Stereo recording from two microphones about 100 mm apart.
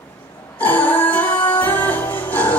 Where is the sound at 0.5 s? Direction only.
15° left (ahead or behind).